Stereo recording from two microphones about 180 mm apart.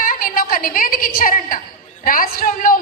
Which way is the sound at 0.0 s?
50° left (ahead or behind).